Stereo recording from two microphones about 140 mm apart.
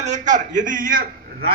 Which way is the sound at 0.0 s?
60° right (ahead or behind).